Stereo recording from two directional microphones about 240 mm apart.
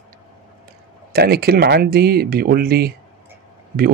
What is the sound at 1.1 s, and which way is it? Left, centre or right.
Speech, right.